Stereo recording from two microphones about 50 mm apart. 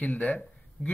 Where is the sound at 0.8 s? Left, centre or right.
Centre.